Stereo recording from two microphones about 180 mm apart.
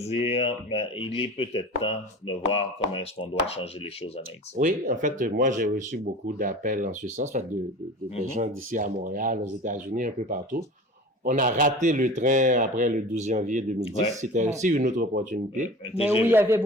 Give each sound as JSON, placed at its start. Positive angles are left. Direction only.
{"t": 0.0, "sound": "speech", "side_deg": 35}
{"t": 4.5, "sound": "speech", "side_deg": -45}
{"t": 16.2, "sound": "a man's voice", "side_deg": -10}